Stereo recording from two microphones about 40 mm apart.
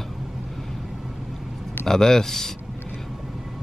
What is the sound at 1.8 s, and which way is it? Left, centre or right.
Speech, centre.